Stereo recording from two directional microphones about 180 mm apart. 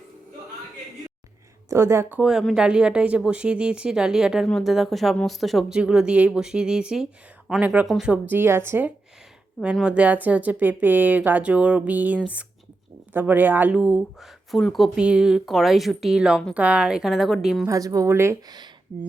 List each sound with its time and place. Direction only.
1.7 s a woman's voice: 15° right (ahead or behind)
9.6 s a woman's voice: centre (ahead or behind)
17.7 s speech: 20° right (ahead or behind)